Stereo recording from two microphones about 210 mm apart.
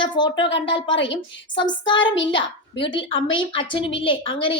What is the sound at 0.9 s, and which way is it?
Speech, 60° left (ahead or behind).